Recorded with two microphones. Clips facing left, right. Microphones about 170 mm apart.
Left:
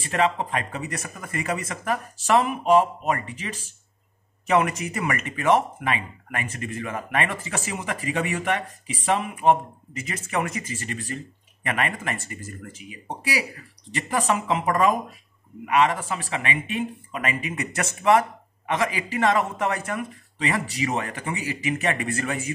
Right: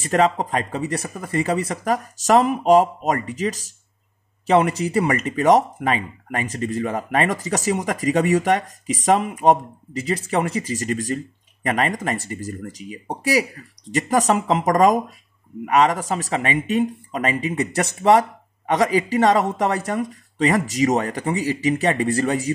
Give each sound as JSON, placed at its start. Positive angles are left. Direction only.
{"t": 0.0, "sound": "speech", "side_deg": -40}